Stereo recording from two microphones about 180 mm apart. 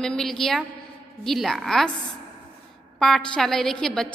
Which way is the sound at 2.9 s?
Centre (ahead or behind).